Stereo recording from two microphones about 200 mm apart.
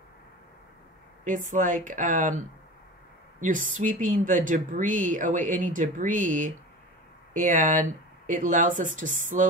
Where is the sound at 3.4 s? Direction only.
40° right (ahead or behind).